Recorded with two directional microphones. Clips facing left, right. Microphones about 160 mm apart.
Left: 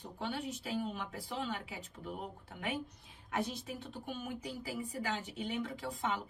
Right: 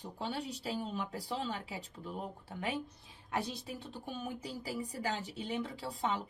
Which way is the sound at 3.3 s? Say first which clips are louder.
Even; 35° right (ahead or behind).